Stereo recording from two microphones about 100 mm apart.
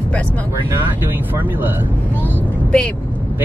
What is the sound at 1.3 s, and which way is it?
Speech, 20° right (ahead or behind).